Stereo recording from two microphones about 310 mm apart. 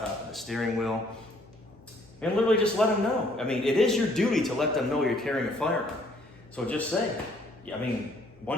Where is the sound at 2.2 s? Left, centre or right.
Centre.